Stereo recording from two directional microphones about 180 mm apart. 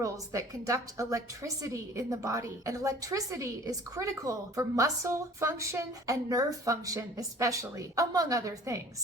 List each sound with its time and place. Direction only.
0.0 s a woman's voice: 20° right (ahead or behind)